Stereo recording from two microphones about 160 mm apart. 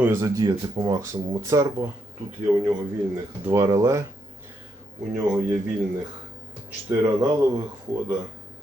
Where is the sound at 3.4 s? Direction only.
20° right (ahead or behind).